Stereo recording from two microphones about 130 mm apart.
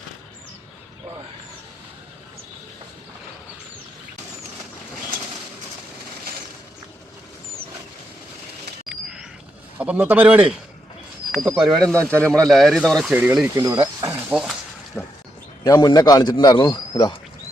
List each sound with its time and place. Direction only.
9.7 s a man's voice: 10° right (ahead or behind)
11.3 s speech: centre (ahead or behind)
13.1 s a man's voice: 10° right (ahead or behind)
14.0 s snake: 20° right (ahead or behind)
14.3 s speech: 5° right (ahead or behind)
15.0 s a sound: 15° left (ahead or behind)
15.6 s a man's voice: 30° left (ahead or behind)